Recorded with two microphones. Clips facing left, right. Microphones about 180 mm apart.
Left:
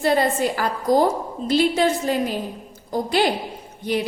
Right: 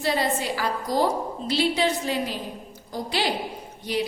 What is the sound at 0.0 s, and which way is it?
A woman's voice, 50° left (ahead or behind).